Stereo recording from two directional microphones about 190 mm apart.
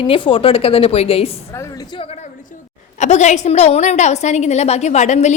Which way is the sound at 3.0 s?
40° left (ahead or behind).